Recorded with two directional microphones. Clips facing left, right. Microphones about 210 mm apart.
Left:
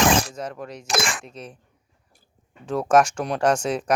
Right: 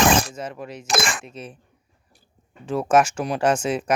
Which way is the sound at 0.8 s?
55° right (ahead or behind).